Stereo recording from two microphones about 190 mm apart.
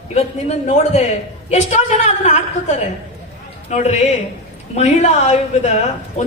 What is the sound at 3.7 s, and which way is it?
A woman's voice, 35° left (ahead or behind).